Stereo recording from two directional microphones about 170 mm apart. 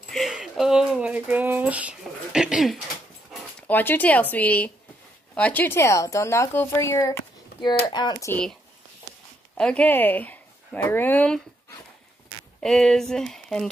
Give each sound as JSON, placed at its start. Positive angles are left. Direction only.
{"t": 0.1, "sound": "speech", "side_deg": 0}
{"t": 3.6, "sound": "a woman's voice", "side_deg": 10}
{"t": 8.3, "sound": "speech", "side_deg": 5}
{"t": 9.6, "sound": "speech", "side_deg": 5}
{"t": 12.5, "sound": "speech", "side_deg": 0}